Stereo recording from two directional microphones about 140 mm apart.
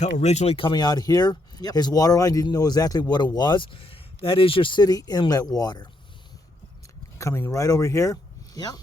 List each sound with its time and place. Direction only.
0.0 s speech: 55° left (ahead or behind); by 5.9 s 30° left (ahead or behind)
7.2 s speech: 20° left (ahead or behind)